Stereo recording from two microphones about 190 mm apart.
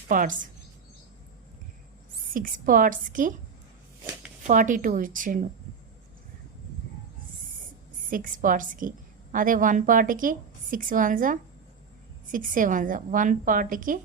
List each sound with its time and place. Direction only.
0.1 s a woman's voice: 45° right (ahead or behind)
2.3 s a woman's voice: 45° right (ahead or behind)
4.4 s a woman's voice: 40° right (ahead or behind)
8.1 s a woman's voice: 45° right (ahead or behind)